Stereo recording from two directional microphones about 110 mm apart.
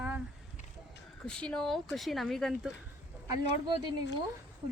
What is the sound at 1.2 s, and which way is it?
Speech, 10° left (ahead or behind).